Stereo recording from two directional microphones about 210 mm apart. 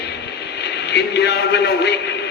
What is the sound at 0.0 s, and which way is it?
A man's voice, 50° left (ahead or behind).